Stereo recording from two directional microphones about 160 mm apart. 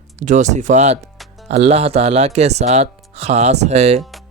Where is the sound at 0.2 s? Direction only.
50° right (ahead or behind).